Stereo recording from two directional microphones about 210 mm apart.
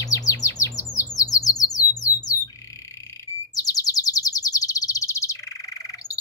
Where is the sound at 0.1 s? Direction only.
15° left (ahead or behind).